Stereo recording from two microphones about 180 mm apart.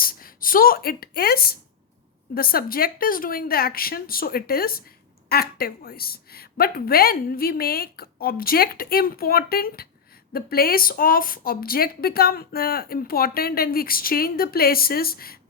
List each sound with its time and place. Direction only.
0.0 s speech: 55° left (ahead or behind)